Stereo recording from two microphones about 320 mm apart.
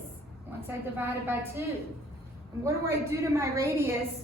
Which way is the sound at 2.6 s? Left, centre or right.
Centre.